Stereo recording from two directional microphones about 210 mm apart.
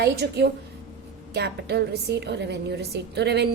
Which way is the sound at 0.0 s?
50° right (ahead or behind).